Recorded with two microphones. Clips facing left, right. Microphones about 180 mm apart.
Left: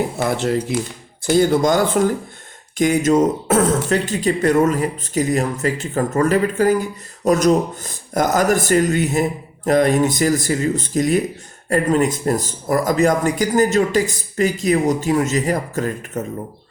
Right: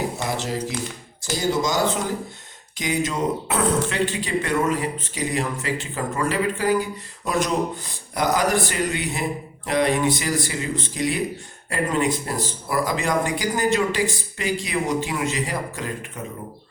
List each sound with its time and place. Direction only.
0.2 s speech: 60° left (ahead or behind); by 16.2 s 45° left (ahead or behind)